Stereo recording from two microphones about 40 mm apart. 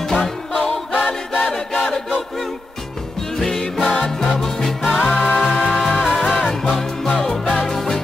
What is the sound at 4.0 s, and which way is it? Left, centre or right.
Music, centre.